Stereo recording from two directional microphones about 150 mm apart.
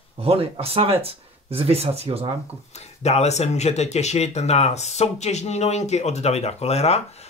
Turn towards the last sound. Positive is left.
turn(degrees=45)  # may be behind; listen again after turning